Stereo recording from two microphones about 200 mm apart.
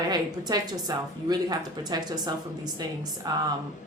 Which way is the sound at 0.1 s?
20° right (ahead or behind).